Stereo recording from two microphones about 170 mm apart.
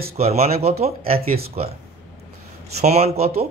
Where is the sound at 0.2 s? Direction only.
35° right (ahead or behind).